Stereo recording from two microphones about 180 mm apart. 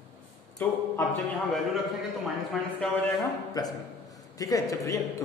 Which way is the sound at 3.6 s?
20° left (ahead or behind).